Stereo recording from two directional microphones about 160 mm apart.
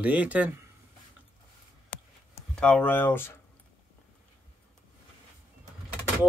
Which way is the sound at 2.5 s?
5° left (ahead or behind).